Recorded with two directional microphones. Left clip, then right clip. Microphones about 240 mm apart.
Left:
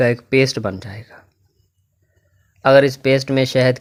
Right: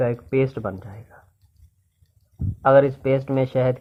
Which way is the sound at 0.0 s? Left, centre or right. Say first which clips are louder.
Left 6 dB; left.